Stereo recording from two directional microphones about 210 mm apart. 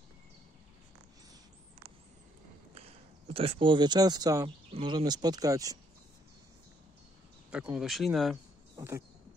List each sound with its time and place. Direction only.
3.3 s speech: 25° right (ahead or behind)
7.5 s speech: 5° right (ahead or behind)
8.7 s a sound: 15° right (ahead or behind)